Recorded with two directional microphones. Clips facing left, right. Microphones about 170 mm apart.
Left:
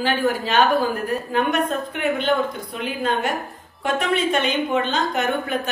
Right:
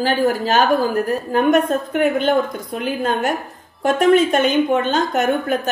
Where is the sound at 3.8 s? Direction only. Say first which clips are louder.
Right 8 dB; 45° right (ahead or behind).